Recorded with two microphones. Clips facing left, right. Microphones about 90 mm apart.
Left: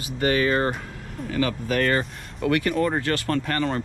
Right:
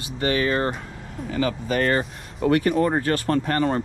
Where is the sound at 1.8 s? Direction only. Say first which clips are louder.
Right 1 dB; 40° right (ahead or behind).